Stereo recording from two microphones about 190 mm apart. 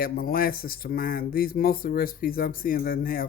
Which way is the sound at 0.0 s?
50° left (ahead or behind).